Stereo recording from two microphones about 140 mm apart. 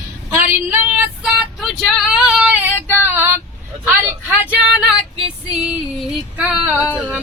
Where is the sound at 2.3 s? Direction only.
10° right (ahead or behind).